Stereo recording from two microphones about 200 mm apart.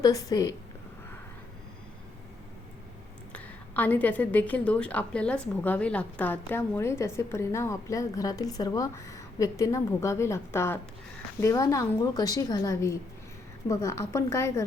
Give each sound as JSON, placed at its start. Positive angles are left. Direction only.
{"t": 0.0, "sound": "a woman's voice", "side_deg": 20}
{"t": 3.3, "sound": "a woman's voice", "side_deg": 10}